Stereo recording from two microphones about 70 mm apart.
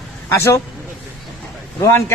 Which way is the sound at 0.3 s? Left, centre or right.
Left.